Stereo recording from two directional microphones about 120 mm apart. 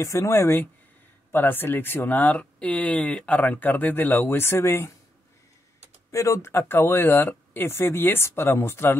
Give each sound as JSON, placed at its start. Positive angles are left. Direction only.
{"t": 0.0, "sound": "speech", "side_deg": 25}
{"t": 6.1, "sound": "speech", "side_deg": 25}